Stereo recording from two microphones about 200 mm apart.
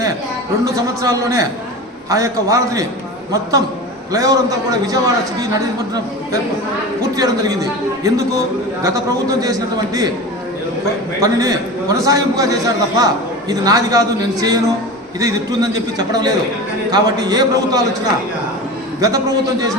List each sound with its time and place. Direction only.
0.6 s a man's voice: 15° right (ahead or behind)
4.1 s a man's voice: 15° right (ahead or behind)
7.2 s a man's voice: 20° right (ahead or behind)
11.2 s a man's voice: 20° right (ahead or behind)
15.2 s a man's voice: 20° right (ahead or behind)